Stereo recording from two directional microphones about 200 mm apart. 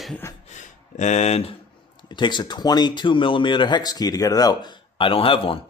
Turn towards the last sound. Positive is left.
turn(degrees=25)  # may be behind; listen again after turning